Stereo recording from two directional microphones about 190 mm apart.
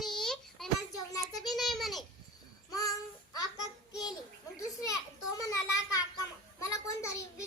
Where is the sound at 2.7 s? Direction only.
20° left (ahead or behind).